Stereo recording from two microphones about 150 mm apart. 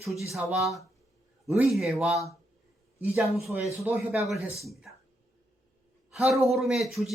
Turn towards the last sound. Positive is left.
turn(degrees=0)  # may be behind; listen again after turning